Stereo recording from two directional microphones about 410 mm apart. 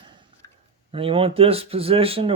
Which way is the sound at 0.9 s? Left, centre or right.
Centre.